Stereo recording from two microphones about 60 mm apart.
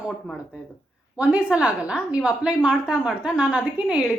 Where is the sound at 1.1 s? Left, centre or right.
Centre.